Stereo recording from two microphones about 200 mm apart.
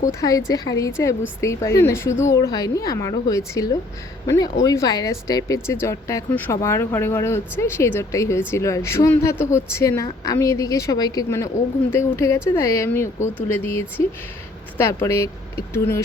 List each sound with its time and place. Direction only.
0.1 s speech: 15° left (ahead or behind)
14.8 s speech: 10° left (ahead or behind)